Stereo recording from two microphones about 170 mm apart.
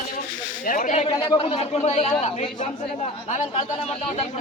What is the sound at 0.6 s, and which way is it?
Speech, 50° left (ahead or behind).